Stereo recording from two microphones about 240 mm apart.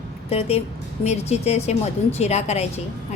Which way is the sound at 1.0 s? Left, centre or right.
Left.